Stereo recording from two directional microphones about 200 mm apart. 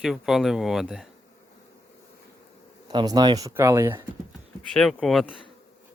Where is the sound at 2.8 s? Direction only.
20° right (ahead or behind).